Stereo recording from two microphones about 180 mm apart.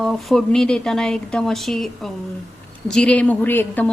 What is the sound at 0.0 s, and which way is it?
A woman's voice, centre (ahead or behind).